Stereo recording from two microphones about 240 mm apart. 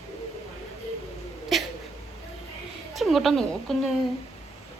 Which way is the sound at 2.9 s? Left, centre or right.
Centre.